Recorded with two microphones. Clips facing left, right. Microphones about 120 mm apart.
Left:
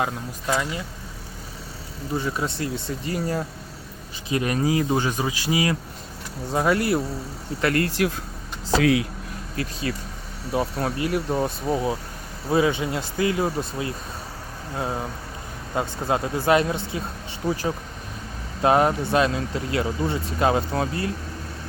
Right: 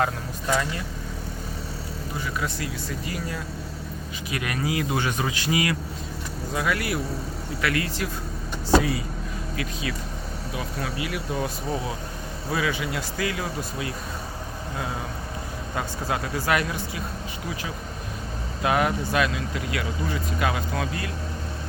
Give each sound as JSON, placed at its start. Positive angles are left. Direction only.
{"t": 2.1, "sound": "speech", "side_deg": 30}
{"t": 5.0, "sound": "speech", "side_deg": 20}
{"t": 6.5, "sound": "speech", "side_deg": 35}
{"t": 7.6, "sound": "speech", "side_deg": 45}
{"t": 8.8, "sound": "speech", "side_deg": 90}
{"t": 9.9, "sound": "speech", "side_deg": 40}
{"t": 15.7, "sound": "speech", "side_deg": 25}
{"t": 18.6, "sound": "speech", "side_deg": 35}